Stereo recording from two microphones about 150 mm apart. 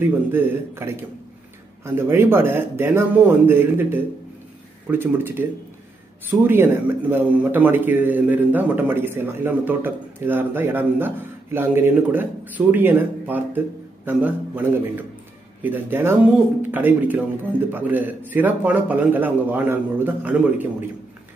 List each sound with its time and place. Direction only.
0.0 s a man's voice: 15° right (ahead or behind)